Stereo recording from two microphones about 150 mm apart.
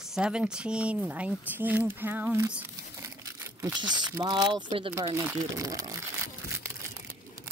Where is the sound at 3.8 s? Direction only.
30° right (ahead or behind).